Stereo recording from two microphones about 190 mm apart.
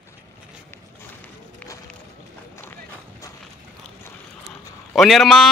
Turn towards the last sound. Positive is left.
turn(degrees=0)  # may be behind; listen again after turning